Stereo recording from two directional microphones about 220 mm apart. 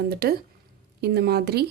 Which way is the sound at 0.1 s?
45° right (ahead or behind).